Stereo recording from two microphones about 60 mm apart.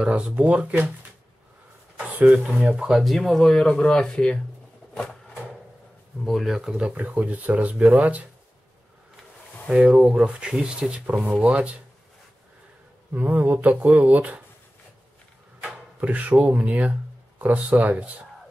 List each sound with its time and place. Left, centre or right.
0.0 s speech: centre
2.0 s a sound: right
2.8 s speech: centre
4.9 s a sound: centre
6.2 s speech: centre
6.8 s speech: centre
9.7 s speech: centre
13.1 s speech: right
15.6 s speech: right